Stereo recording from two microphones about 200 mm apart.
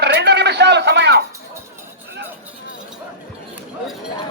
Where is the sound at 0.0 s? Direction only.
55° right (ahead or behind).